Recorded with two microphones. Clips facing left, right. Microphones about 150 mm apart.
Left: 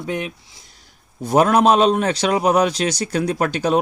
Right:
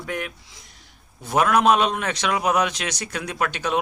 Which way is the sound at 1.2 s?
35° left (ahead or behind).